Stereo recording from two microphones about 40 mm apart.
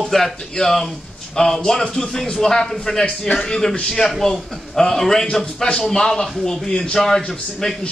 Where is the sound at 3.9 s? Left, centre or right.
Centre.